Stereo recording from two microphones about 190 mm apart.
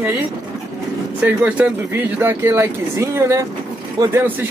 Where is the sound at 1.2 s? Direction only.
5° right (ahead or behind).